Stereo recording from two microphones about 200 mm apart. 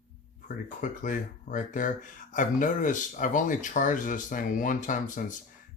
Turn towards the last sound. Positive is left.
turn(degrees=40)  # may be behind; listen again after turning